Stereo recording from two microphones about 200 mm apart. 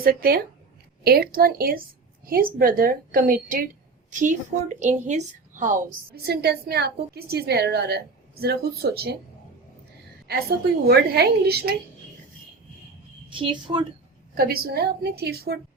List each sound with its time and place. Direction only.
0.0 s a woman's voice: 50° right (ahead or behind)
6.2 s a woman's voice: 55° right (ahead or behind)
10.3 s a woman's voice: 50° right (ahead or behind)
13.3 s a woman's voice: 25° right (ahead or behind)
14.3 s a woman's voice: 50° right (ahead or behind)